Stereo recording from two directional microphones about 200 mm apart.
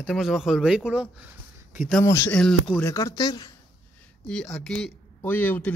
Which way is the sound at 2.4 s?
5° left (ahead or behind).